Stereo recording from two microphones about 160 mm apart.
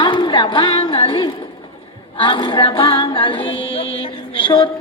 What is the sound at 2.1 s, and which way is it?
Music, 30° left (ahead or behind).